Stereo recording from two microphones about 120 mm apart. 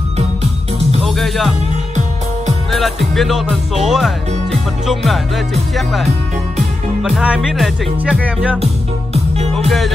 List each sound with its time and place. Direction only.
1.0 s music: centre (ahead or behind)
2.7 s speech: centre (ahead or behind)
9.1 s music: 65° right (ahead or behind)